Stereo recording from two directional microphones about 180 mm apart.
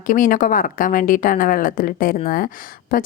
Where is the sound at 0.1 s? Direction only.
50° left (ahead or behind).